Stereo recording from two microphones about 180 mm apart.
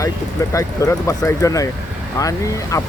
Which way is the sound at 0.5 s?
15° left (ahead or behind).